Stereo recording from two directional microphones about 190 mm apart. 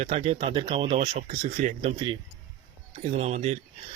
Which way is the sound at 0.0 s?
35° right (ahead or behind).